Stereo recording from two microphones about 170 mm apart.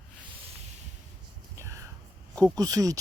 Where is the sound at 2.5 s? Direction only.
20° right (ahead or behind).